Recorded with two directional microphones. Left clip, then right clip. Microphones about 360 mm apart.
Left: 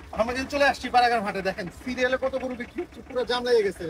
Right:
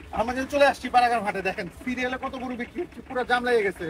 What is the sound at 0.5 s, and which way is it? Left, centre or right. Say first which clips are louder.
Speech: right 4 dB; centre.